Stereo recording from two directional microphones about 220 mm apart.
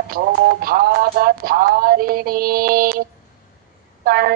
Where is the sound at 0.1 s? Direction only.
40° right (ahead or behind).